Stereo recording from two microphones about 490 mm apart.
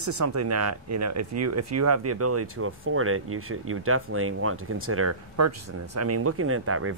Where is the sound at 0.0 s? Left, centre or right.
Right.